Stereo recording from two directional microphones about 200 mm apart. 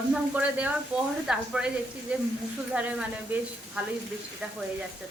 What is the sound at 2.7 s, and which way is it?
Speech, 5° right (ahead or behind).